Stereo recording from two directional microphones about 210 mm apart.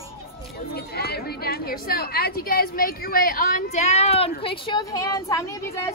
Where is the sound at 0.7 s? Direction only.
50° left (ahead or behind); by 5.6 s 15° left (ahead or behind).